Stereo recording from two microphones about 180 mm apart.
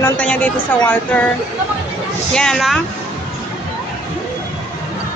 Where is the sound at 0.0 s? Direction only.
10° left (ahead or behind).